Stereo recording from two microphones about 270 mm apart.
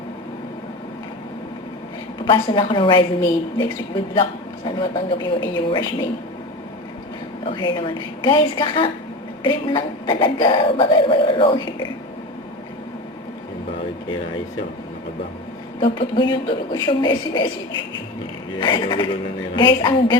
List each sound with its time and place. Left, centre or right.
2.2 s speech: centre
7.4 s speech: centre
15.8 s speech: centre
18.6 s speech: centre